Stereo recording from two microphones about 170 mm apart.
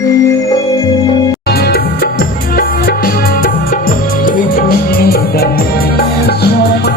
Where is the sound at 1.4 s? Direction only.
65° left (ahead or behind).